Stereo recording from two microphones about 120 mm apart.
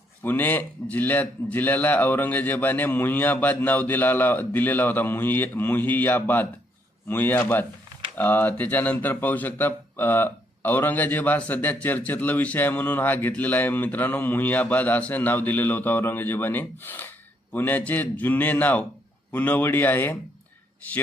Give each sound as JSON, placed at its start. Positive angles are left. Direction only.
{"t": 0.2, "sound": "speech", "side_deg": 15}